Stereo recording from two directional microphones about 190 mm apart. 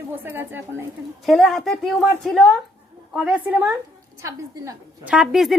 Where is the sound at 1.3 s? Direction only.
Centre (ahead or behind); by 5.1 s 15° right (ahead or behind).